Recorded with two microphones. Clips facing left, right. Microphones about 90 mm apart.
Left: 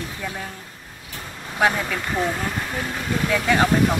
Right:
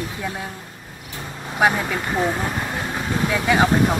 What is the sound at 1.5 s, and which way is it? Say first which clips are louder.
Speech: right 2 dB; 15° right (ahead or behind).